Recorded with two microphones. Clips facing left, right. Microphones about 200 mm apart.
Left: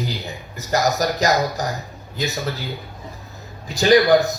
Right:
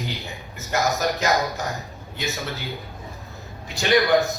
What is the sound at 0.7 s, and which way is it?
Speech, 40° left (ahead or behind).